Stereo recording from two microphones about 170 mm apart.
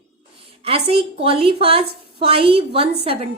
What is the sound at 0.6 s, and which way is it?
A woman's voice, 35° right (ahead or behind).